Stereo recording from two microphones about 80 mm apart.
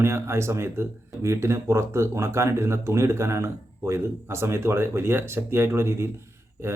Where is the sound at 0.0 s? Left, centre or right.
Right.